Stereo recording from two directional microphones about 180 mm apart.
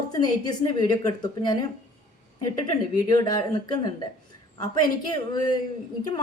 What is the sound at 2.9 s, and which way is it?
Speech, 20° left (ahead or behind).